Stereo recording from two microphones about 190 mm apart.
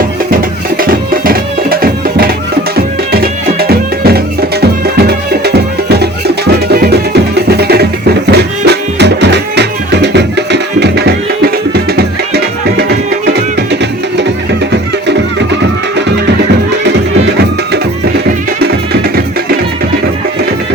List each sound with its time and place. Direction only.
0.8 s music: 50° right (ahead or behind)